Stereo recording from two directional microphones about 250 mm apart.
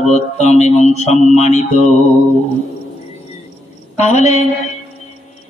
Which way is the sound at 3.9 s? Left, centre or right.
Left.